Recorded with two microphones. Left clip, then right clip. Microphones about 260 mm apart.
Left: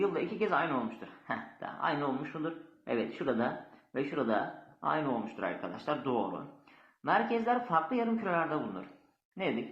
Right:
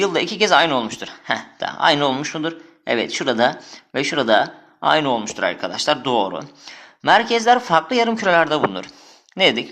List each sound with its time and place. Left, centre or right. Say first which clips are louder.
0.0 s speech: right 13 dB; right